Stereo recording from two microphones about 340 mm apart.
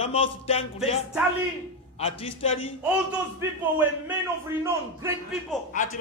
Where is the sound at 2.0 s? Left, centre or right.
Centre.